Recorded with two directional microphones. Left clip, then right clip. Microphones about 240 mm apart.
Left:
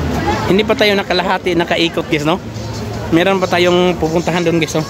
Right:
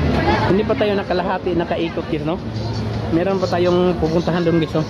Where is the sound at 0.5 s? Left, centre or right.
Left.